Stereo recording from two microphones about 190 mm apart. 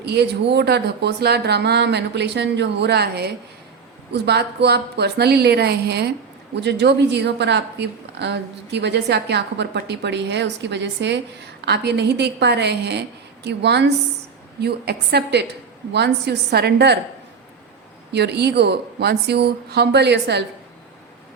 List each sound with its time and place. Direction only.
0.0 s a woman's voice: 60° right (ahead or behind)
18.1 s a woman's voice: 65° right (ahead or behind)